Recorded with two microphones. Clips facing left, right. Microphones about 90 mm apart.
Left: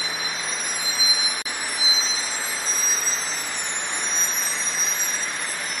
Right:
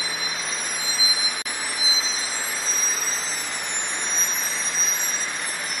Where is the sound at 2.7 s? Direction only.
20° left (ahead or behind).